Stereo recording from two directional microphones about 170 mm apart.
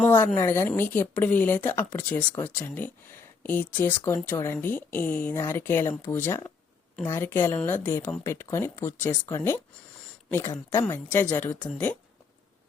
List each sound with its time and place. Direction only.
0.0 s a sound: 10° left (ahead or behind)
0.3 s speech: 15° left (ahead or behind)
10.7 s speech: 15° left (ahead or behind)